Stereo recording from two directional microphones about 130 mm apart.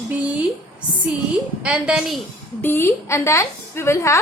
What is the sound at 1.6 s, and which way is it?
Speech, 5° right (ahead or behind).